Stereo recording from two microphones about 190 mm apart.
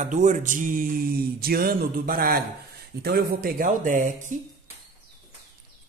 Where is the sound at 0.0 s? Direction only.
40° right (ahead or behind).